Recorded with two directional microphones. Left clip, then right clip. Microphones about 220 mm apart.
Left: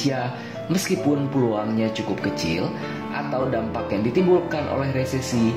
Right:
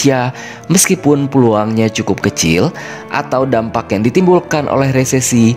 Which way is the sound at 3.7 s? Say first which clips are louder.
Right 9 dB; 50° right (ahead or behind).